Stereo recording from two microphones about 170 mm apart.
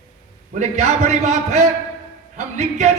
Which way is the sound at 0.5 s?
40° right (ahead or behind).